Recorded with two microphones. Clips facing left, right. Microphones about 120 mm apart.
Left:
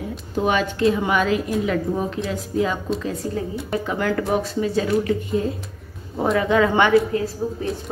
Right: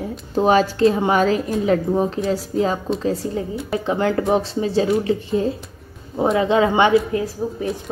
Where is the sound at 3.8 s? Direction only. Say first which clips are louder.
Right 5 dB; 25° right (ahead or behind).